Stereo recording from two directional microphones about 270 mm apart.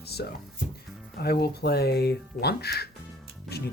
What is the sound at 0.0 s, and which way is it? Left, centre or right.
Music, left.